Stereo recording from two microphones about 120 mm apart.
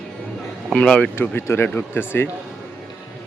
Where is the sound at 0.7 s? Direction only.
5° left (ahead or behind).